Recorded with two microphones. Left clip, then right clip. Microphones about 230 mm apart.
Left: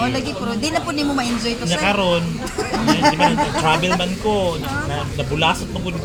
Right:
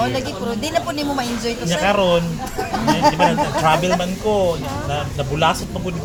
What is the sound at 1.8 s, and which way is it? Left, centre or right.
Speech, right.